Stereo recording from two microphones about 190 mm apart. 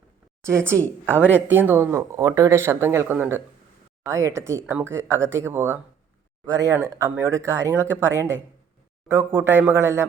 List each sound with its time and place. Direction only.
0.4 s speech: 15° right (ahead or behind)